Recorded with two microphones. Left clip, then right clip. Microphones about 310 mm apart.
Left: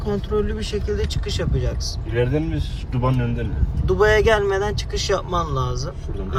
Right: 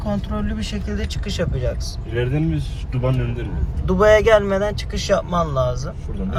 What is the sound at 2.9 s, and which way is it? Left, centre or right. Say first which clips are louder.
Speech: even; left.